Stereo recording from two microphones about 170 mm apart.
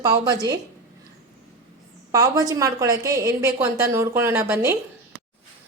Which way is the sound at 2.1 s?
20° right (ahead or behind).